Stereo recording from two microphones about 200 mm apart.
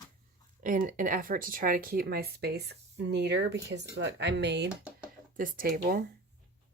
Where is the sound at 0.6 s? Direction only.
40° right (ahead or behind); by 4.7 s 60° right (ahead or behind).